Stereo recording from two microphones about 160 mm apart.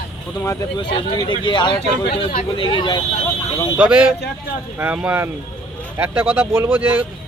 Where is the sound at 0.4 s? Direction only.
25° left (ahead or behind).